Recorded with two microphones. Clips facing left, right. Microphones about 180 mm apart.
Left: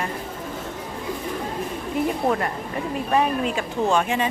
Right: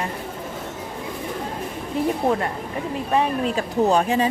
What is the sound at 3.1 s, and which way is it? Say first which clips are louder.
Speech: even; 30° right (ahead or behind).